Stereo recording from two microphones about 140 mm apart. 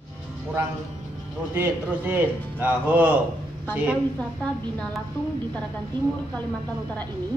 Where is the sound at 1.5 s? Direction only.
15° right (ahead or behind).